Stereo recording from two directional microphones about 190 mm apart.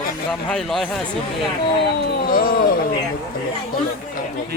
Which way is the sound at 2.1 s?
50° left (ahead or behind).